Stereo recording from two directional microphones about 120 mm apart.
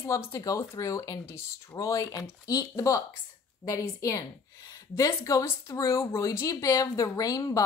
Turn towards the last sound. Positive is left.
turn(degrees=30)  # may be behind; listen again after turning